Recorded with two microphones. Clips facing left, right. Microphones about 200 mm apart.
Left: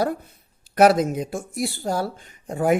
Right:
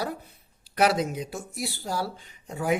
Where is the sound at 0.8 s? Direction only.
45° left (ahead or behind).